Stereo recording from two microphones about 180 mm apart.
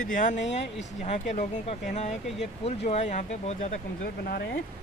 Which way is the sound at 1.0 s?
40° left (ahead or behind).